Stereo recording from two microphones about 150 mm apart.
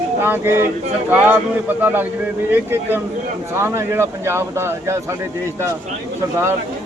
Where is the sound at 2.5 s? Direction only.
15° right (ahead or behind).